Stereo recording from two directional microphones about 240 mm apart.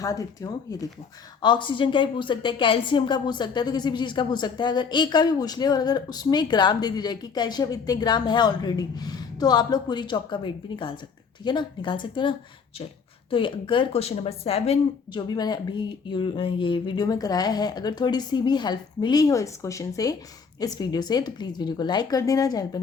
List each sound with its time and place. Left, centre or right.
0.0 s a woman's voice: centre
13.3 s a woman's voice: left